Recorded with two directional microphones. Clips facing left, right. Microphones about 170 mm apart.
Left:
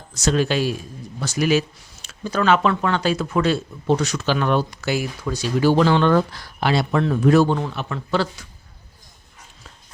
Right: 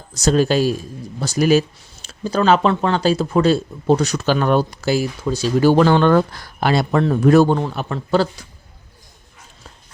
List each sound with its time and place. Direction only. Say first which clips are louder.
0.1 s speech: right 4 dB; 35° right (ahead or behind)
5.5 s speech: right 3 dB; 50° right (ahead or behind)